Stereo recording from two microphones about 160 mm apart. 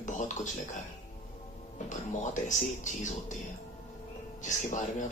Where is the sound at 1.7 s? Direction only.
50° left (ahead or behind).